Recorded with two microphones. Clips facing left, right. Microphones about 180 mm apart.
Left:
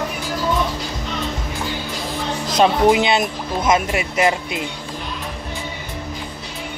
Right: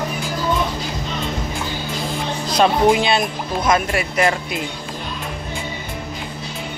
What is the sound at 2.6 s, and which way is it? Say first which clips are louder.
Speech: left 1 dB; 20° left (ahead or behind).